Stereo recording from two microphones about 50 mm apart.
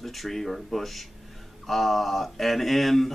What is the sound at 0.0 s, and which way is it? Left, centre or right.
Speech, centre.